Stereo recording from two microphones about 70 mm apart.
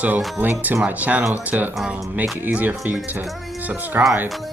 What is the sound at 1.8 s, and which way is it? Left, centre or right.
Speech, centre.